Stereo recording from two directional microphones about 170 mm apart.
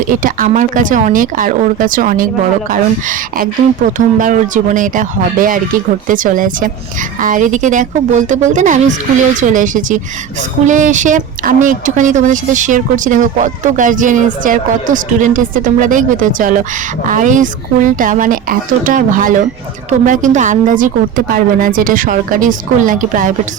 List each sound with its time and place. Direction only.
0.1 s speech: 55° right (ahead or behind)